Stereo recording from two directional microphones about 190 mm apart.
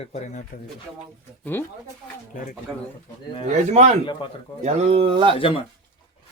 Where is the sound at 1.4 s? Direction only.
10° left (ahead or behind).